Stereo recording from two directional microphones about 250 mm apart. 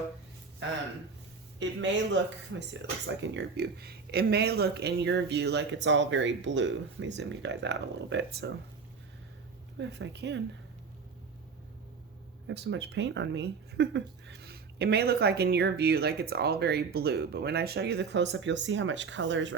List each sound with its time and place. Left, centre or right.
1.5 s speech: right
9.7 s speech: right
12.5 s speech: right